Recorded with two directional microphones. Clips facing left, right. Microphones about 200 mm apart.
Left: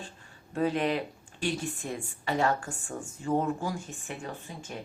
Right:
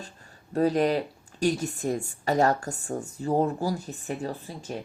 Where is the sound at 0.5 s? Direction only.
40° right (ahead or behind).